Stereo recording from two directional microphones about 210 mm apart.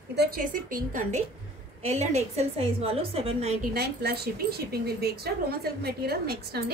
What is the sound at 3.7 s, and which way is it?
A woman's voice, 50° right (ahead or behind).